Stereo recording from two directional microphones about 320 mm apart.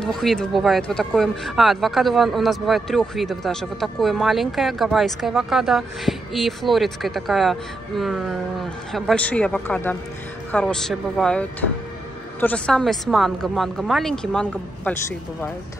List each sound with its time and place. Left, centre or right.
0.0 s speech: centre